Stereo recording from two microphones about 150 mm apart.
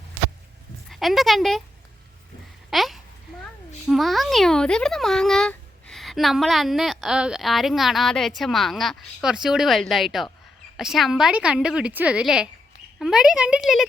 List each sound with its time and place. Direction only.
0.9 s speech: centre (ahead or behind)
2.6 s babbling: centre (ahead or behind)
3.8 s a child's voice: centre (ahead or behind)